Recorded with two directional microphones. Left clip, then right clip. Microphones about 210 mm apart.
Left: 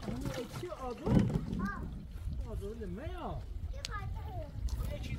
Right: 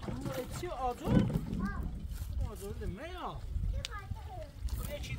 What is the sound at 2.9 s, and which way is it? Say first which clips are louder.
Speech: right 1 dB; 20° right (ahead or behind).